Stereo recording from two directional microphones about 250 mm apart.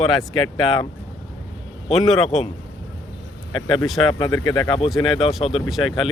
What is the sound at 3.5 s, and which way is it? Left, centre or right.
Speech, centre.